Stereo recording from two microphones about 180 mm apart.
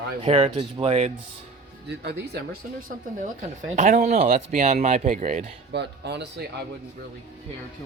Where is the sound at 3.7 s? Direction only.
45° right (ahead or behind).